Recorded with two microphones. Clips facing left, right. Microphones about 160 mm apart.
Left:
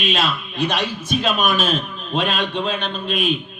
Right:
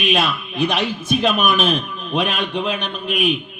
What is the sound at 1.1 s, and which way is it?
A man's voice, 15° right (ahead or behind).